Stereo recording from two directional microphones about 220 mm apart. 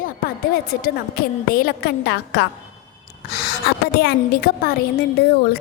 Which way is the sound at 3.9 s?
45° left (ahead or behind).